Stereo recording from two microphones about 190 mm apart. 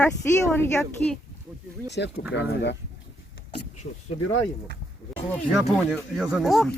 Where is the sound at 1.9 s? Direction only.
65° left (ahead or behind).